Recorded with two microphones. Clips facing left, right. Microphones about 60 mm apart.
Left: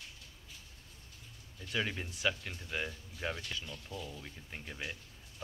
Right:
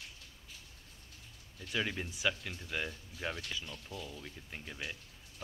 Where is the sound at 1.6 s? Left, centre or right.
Centre.